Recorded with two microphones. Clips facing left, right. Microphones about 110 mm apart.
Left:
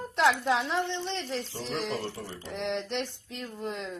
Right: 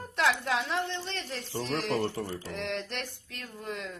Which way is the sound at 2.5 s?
20° left (ahead or behind).